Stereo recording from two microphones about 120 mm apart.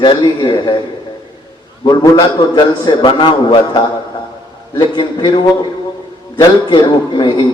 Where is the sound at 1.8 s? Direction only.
40° left (ahead or behind).